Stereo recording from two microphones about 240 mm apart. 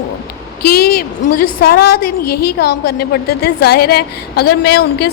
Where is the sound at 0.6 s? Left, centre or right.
Left.